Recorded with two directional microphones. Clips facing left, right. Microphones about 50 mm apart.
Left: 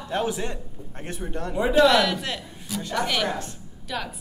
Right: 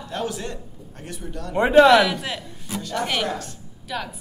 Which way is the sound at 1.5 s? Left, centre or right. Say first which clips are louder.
Right 6 dB; right.